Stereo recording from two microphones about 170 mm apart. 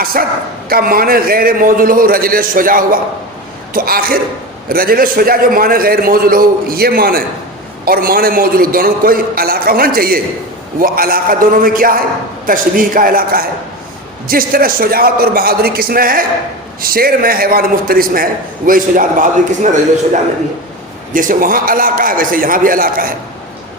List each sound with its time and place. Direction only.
0.0 s a man's voice: 60° right (ahead or behind)
21.1 s a man's voice: 55° right (ahead or behind)